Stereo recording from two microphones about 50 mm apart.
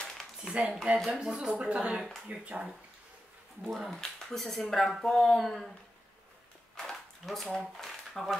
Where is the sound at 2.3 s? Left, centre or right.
Right.